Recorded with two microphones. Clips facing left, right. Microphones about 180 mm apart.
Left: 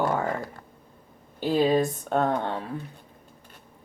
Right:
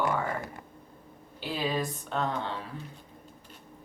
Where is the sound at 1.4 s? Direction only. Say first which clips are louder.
Left 9 dB; 45° left (ahead or behind).